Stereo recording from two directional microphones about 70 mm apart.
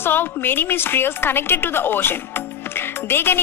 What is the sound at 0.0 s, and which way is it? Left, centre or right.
A woman's voice, left.